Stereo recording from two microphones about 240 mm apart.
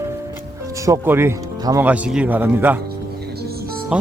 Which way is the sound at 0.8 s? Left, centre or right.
Centre.